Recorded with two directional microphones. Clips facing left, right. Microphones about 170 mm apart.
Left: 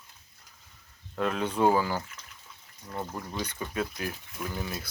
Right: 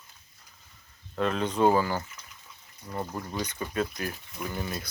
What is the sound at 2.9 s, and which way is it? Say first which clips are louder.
Speech: right 2 dB; 5° right (ahead or behind).